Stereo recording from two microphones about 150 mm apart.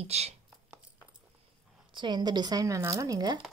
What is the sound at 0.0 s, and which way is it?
Speech, 45° right (ahead or behind).